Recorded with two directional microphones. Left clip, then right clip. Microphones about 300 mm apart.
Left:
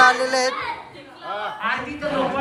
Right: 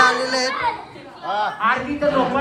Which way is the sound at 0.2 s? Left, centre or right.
Centre.